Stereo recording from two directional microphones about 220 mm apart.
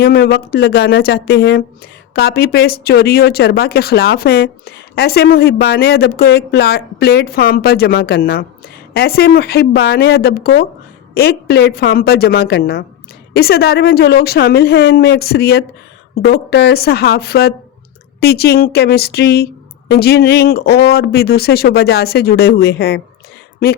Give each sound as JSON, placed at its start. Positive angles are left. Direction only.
{"t": 0.0, "sound": "speech", "side_deg": 45}